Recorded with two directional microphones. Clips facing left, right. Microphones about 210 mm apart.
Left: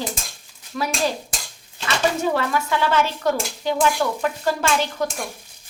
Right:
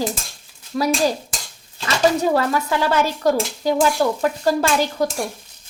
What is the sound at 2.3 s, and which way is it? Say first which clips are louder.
Speech: right 3 dB; 40° right (ahead or behind).